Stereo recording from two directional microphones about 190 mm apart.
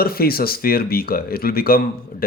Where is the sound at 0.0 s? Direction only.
50° left (ahead or behind).